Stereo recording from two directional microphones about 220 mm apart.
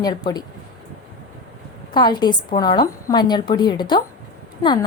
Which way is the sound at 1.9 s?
20° left (ahead or behind).